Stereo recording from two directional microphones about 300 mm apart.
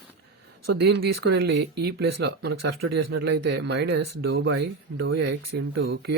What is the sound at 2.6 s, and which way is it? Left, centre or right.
Speech, right.